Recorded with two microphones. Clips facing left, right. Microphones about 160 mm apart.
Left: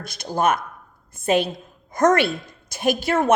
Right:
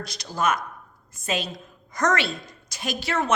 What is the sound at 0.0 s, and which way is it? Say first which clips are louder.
A woman's voice: left 4 dB; 50° left (ahead or behind).